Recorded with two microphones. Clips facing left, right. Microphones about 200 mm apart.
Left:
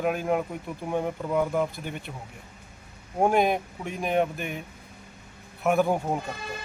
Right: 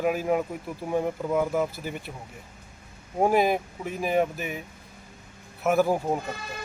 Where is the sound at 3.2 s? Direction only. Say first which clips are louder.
Even; centre (ahead or behind).